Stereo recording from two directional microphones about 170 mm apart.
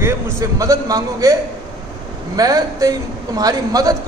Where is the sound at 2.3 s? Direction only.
20° right (ahead or behind).